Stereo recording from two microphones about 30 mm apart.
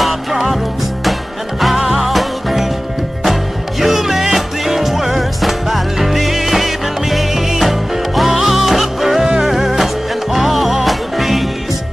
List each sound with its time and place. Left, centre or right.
0.0 s music: centre
1.6 s music: centre
3.8 s music: centre
9.2 s music: right
9.5 s music: centre